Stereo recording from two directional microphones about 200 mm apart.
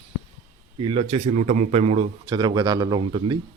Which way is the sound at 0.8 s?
25° right (ahead or behind).